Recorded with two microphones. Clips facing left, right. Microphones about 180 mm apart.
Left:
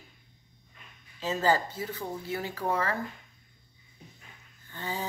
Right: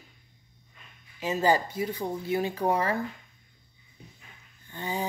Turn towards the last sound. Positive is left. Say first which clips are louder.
# right 3 dB
turn(degrees=-15)  # may be behind; listen again after turning